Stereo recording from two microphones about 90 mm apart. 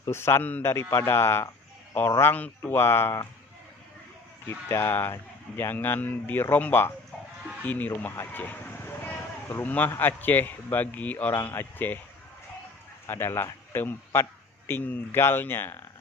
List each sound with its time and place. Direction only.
0.1 s speech: 30° left (ahead or behind)
2.3 s speech: 20° left (ahead or behind)
4.4 s speech: 25° left (ahead or behind)
13.1 s a man's voice: 25° left (ahead or behind)